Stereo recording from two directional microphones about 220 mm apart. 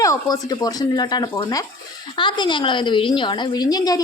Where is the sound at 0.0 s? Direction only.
15° left (ahead or behind).